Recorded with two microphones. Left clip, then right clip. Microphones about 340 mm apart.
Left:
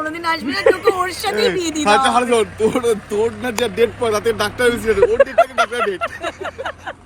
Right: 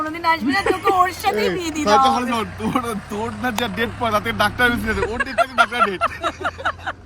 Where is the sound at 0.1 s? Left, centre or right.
Centre.